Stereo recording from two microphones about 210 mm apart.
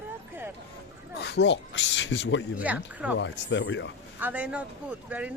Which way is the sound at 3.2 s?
60° left (ahead or behind).